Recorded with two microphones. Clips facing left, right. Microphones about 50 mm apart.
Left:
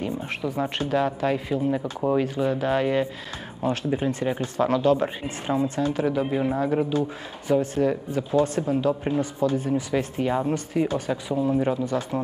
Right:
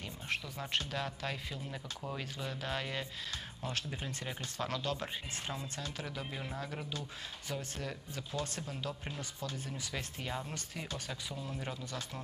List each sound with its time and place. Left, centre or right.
0.0 s speech: left
6.9 s speech: left